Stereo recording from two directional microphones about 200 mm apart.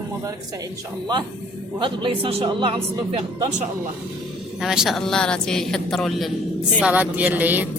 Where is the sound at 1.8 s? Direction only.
25° right (ahead or behind).